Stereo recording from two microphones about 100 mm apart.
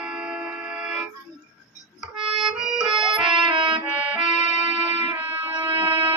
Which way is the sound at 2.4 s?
5° right (ahead or behind).